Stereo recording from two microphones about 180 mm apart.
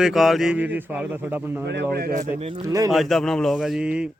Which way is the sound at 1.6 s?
65° right (ahead or behind).